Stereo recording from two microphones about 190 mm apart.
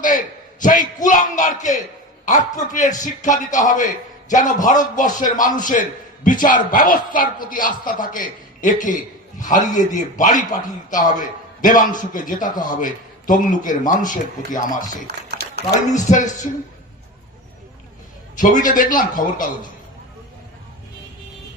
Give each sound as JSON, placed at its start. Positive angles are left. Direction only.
{"t": 0.0, "sound": "a man's voice", "side_deg": 45}
{"t": 16.0, "sound": "a woman's voice", "side_deg": 40}
{"t": 18.3, "sound": "a man's voice", "side_deg": 45}